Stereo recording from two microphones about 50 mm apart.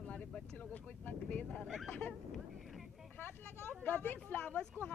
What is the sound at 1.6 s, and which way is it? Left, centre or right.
Speech, centre.